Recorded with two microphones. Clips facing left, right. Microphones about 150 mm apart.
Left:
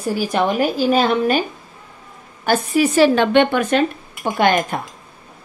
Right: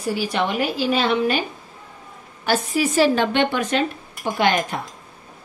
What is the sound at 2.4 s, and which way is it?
Speech, 60° left (ahead or behind).